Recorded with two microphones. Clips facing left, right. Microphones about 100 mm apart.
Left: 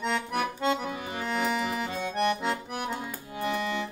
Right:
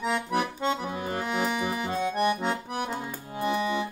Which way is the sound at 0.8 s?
35° right (ahead or behind).